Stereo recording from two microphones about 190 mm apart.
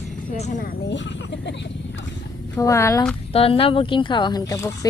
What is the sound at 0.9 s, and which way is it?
Speech, 70° left (ahead or behind).